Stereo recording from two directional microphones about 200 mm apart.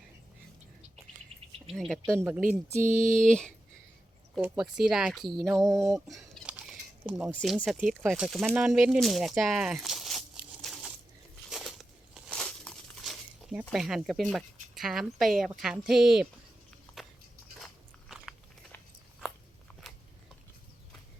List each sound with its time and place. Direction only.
1.7 s speech: centre (ahead or behind)
2.0 s speech: 15° right (ahead or behind)
2.8 s a sound: 40° right (ahead or behind)
4.4 s speech: 5° right (ahead or behind)
5.6 s speech: 15° right (ahead or behind)
5.9 s a sound: centre (ahead or behind)
7.3 s speech: centre (ahead or behind)
11.4 s a sound: centre (ahead or behind)
17.0 s walk: centre (ahead or behind)